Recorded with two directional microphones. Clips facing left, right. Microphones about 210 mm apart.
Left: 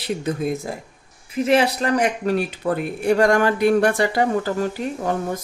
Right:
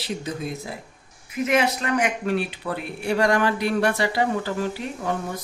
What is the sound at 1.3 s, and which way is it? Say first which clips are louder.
Speech: left 4 dB; 30° left (ahead or behind).